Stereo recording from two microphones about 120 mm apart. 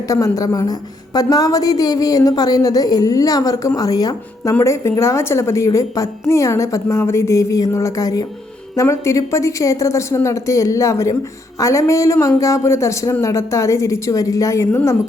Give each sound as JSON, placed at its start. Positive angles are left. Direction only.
{"t": 0.1, "sound": "a woman's voice", "side_deg": 30}